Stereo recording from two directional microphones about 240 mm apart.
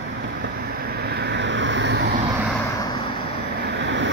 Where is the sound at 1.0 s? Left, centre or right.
Right.